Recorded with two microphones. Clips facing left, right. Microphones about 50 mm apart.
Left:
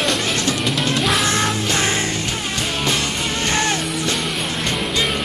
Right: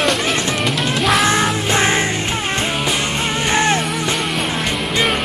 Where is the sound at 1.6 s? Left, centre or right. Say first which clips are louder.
Right 4 dB; right.